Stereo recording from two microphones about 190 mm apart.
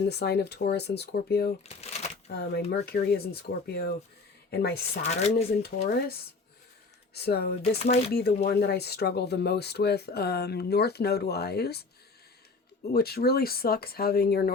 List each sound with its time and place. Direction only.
0.1 s speech: 60° left (ahead or behind)
1.7 s shuffling cards: 35° left (ahead or behind)
2.3 s speech: 55° left (ahead or behind)
5.0 s speech: 35° left (ahead or behind)
5.8 s speech: 50° left (ahead or behind)
7.8 s speech: 35° left (ahead or behind)
8.1 s speech: 55° left (ahead or behind)
12.9 s speech: 55° left (ahead or behind)